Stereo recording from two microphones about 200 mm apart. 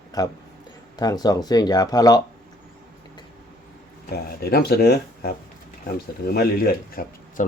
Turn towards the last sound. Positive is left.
turn(degrees=45)  # may be behind; listen again after turning